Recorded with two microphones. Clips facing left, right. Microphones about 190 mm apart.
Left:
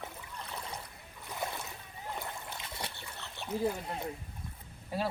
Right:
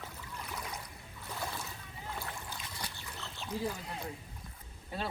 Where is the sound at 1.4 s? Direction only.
20° left (ahead or behind).